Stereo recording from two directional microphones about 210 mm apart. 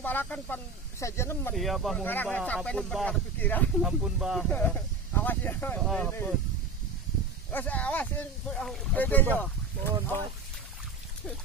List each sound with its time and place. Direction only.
0.0 s speech: 10° left (ahead or behind)
1.5 s speech: centre (ahead or behind)
3.8 s speech: 5° right (ahead or behind)
7.5 s speech: 5° left (ahead or behind)